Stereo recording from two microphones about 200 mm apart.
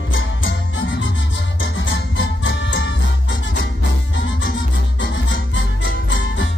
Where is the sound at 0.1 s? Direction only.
75° left (ahead or behind).